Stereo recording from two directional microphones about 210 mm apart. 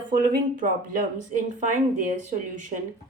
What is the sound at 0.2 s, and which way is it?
Speech, 40° right (ahead or behind).